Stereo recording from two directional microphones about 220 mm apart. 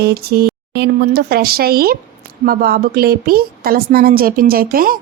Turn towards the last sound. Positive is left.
turn(degrees=-40)  # may be behind; listen again after turning